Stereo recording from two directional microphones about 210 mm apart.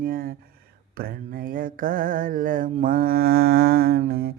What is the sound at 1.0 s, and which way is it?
Mantra, 45° right (ahead or behind).